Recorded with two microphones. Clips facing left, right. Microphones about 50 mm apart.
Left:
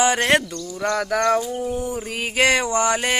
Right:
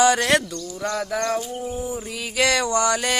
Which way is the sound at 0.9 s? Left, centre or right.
Left.